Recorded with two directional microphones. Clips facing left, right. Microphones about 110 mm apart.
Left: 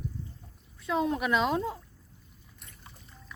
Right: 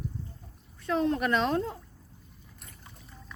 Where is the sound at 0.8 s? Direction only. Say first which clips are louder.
Right 1 dB; 5° left (ahead or behind).